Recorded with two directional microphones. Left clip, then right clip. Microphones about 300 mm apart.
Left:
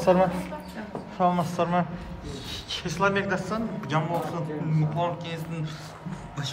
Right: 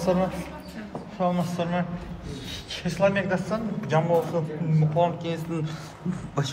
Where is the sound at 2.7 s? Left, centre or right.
Centre.